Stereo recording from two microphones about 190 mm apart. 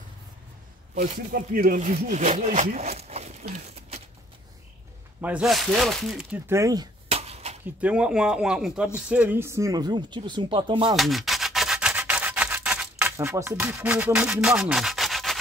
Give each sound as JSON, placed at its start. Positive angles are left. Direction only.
{"t": 0.9, "sound": "speech", "side_deg": -45}
{"t": 5.2, "sound": "speech", "side_deg": -5}
{"t": 6.4, "sound": "speech", "side_deg": -15}
{"t": 7.1, "sound": "a sound", "side_deg": -35}
{"t": 7.6, "sound": "speech", "side_deg": -5}
{"t": 11.0, "sound": "rub", "side_deg": 0}
{"t": 13.0, "sound": "speech", "side_deg": -10}